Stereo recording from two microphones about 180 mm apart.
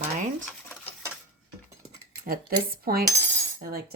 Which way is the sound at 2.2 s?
55° right (ahead or behind).